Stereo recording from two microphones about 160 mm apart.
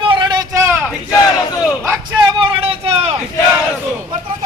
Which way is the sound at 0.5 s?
15° right (ahead or behind).